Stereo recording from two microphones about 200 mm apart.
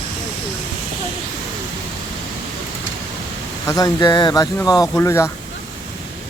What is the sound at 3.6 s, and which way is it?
Speech, 15° left (ahead or behind).